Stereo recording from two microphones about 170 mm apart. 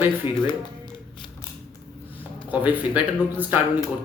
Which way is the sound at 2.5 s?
10° right (ahead or behind).